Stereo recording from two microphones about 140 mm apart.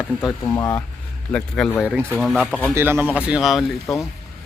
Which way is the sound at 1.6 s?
5° left (ahead or behind).